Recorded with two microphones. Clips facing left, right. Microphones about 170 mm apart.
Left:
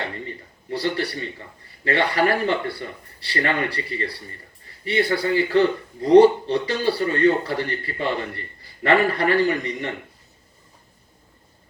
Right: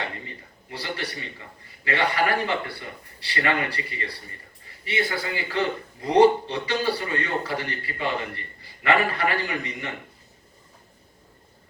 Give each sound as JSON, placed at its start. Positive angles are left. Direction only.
{"t": 0.8, "sound": "a man's voice", "side_deg": 35}